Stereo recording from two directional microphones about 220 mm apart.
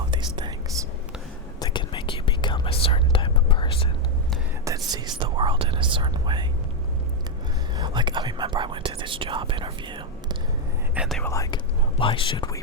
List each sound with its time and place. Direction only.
0.1 s whispering: 20° right (ahead or behind)
1.5 s whispering: 20° left (ahead or behind)
4.9 s whispering: 20° right (ahead or behind)
7.8 s whispering: 20° right (ahead or behind)
10.9 s whispering: 5° right (ahead or behind)
11.2 s whispering: 15° left (ahead or behind)